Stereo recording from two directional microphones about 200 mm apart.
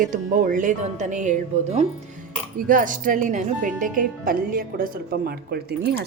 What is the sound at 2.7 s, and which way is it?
Speech, 40° right (ahead or behind).